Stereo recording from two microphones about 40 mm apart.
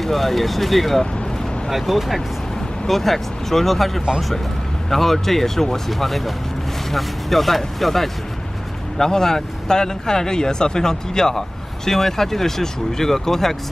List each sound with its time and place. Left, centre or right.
0.0 s speech: centre